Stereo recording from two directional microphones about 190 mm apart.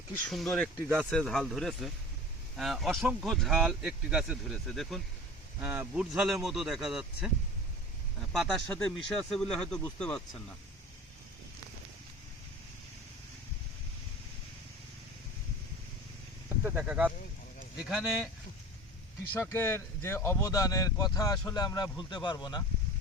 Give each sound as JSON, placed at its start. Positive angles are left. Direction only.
{"t": 0.3, "sound": "speech", "side_deg": 0}
{"t": 16.6, "sound": "speech", "side_deg": -5}
{"t": 19.3, "sound": "speech", "side_deg": 15}